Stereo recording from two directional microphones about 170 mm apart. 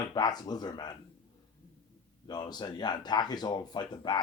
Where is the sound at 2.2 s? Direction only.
25° left (ahead or behind).